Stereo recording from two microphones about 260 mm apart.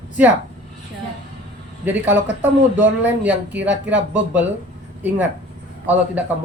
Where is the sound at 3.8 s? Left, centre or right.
Right.